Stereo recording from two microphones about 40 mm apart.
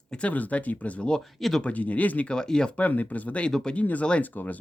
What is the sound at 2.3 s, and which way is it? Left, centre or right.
Speech, centre.